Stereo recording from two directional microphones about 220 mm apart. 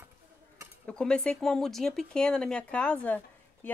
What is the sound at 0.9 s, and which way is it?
Speech, 5° left (ahead or behind).